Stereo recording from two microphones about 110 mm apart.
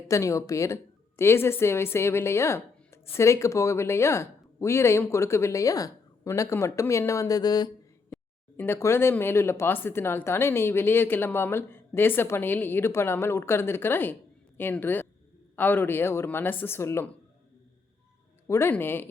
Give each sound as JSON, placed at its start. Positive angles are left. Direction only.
{"t": 0.1, "sound": "a woman's voice", "side_deg": 30}
{"t": 8.5, "sound": "a woman's voice", "side_deg": 20}
{"t": 18.4, "sound": "a woman's voice", "side_deg": 25}